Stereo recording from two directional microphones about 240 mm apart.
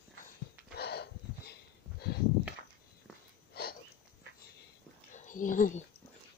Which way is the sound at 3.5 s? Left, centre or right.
Left.